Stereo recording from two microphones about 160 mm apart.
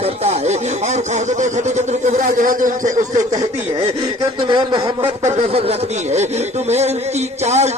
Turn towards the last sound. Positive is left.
turn(degrees=-45)  # may be behind; listen again after turning